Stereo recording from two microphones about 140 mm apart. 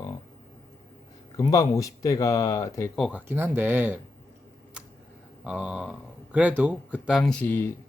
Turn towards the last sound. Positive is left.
turn(degrees=15)  # may be behind; listen again after turning